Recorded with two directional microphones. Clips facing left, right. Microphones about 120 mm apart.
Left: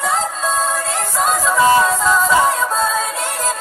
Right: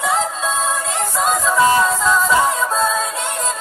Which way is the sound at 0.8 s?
Centre (ahead or behind).